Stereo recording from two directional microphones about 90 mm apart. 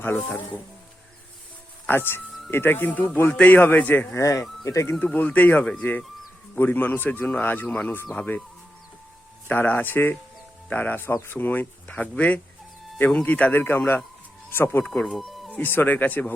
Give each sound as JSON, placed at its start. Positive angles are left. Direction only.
{"t": 0.0, "sound": "speech", "side_deg": 20}
{"t": 1.9, "sound": "speech", "side_deg": 25}
{"t": 4.2, "sound": "speech", "side_deg": 35}
{"t": 4.9, "sound": "speech", "side_deg": 15}
{"t": 9.5, "sound": "speech", "side_deg": 20}
{"t": 14.8, "sound": "speech", "side_deg": 5}
{"t": 15.4, "sound": "speech", "side_deg": 20}